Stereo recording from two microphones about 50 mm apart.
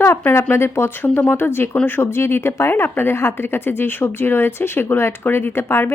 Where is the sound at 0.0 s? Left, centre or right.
Left.